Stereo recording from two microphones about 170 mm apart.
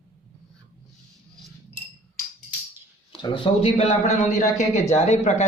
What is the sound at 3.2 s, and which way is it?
A man's voice, 30° left (ahead or behind).